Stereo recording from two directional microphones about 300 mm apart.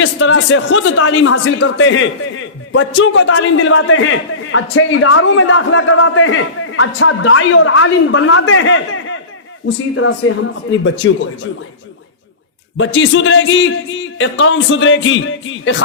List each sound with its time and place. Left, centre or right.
0.0 s speech: left
12.7 s speech: left